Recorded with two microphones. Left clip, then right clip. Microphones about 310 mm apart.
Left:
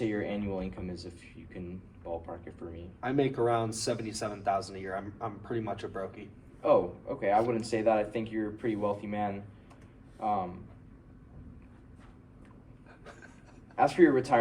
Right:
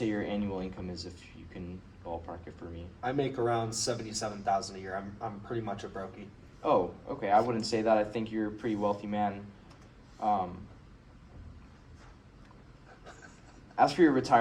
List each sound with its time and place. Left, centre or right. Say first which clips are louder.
0.0 s a sound: even; centre
3.0 s speech: left 2 dB; centre
6.6 s speech: left 2 dB; centre
13.7 s speech: left 1 dB; centre